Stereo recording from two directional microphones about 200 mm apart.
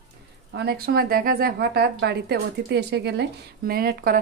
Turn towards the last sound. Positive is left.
turn(degrees=-45)  # may be behind; listen again after turning